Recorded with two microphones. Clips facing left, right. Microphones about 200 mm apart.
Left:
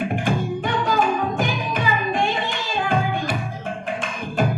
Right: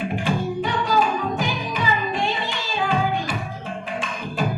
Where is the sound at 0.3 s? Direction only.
50° left (ahead or behind).